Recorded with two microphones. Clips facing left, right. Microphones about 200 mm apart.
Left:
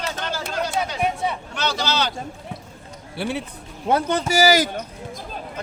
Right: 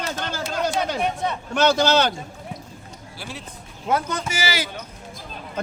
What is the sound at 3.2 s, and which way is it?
Speech, 65° left (ahead or behind).